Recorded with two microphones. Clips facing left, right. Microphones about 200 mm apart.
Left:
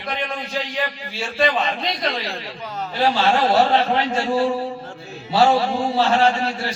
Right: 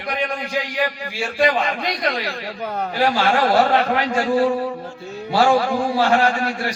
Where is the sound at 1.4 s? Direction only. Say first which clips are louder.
Right 1 dB; 25° left (ahead or behind).